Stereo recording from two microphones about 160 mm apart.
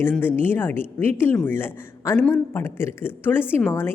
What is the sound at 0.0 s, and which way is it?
A woman's voice, 15° left (ahead or behind).